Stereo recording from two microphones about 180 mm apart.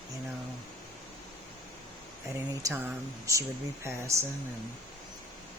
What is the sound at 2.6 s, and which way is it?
Speech, 20° right (ahead or behind).